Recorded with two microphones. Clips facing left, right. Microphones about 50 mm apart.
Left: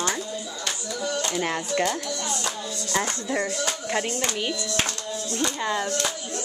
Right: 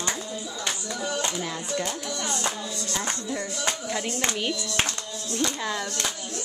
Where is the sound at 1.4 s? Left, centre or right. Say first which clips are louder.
Left 5 dB; left.